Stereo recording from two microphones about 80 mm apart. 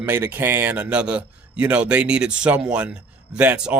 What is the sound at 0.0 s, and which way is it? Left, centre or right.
A man's voice, right.